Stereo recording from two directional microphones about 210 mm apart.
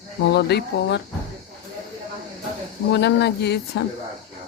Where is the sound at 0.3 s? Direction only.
50° left (ahead or behind).